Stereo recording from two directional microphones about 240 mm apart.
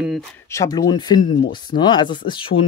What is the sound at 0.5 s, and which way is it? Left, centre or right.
Speech, centre.